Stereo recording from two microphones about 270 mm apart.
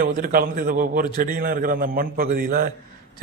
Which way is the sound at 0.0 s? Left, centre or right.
Right.